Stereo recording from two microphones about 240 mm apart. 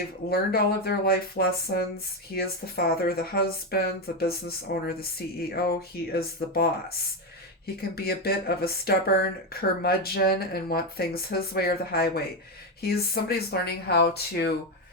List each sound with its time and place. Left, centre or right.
0.3 s speech: left
7.8 s speech: left